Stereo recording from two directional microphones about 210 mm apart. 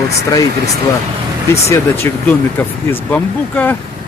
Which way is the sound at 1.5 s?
10° left (ahead or behind).